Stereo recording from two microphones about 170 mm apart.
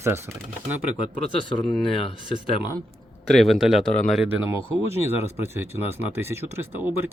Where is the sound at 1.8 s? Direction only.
30° left (ahead or behind).